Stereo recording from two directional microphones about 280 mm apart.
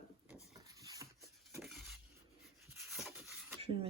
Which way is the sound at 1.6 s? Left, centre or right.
Centre.